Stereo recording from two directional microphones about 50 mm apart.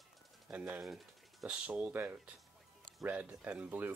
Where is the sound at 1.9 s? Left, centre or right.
Right.